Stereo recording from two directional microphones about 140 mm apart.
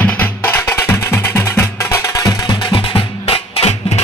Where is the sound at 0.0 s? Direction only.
10° left (ahead or behind).